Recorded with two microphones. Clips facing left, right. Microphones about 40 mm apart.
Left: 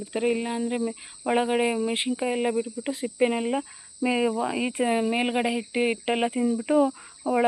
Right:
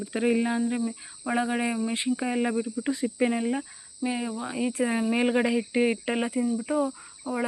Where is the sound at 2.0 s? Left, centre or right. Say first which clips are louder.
Left 1 dB; centre.